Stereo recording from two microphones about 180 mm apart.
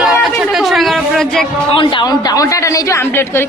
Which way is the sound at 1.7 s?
25° left (ahead or behind).